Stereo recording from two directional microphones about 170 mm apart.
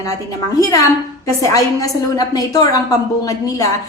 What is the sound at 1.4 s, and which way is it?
A woman's voice, 20° left (ahead or behind).